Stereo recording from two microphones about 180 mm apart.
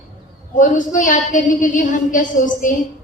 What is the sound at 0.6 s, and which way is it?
A woman's voice, 45° left (ahead or behind).